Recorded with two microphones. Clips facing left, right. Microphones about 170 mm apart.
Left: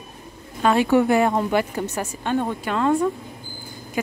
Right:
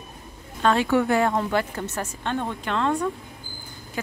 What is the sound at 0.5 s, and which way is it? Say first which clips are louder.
A woman's voice: left 3 dB; 10° left (ahead or behind).